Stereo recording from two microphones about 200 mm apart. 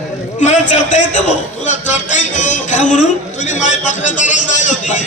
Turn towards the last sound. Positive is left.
turn(degrees=40)  # may be behind; listen again after turning